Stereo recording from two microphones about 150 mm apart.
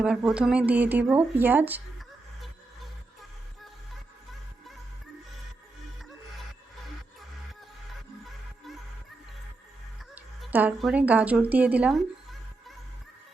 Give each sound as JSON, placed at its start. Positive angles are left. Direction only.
{"t": 0.0, "sound": "speech", "side_deg": -5}
{"t": 10.5, "sound": "speech", "side_deg": -10}